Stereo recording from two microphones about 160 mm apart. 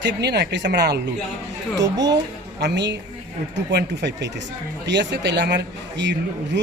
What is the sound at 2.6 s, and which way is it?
Speech, 90° right.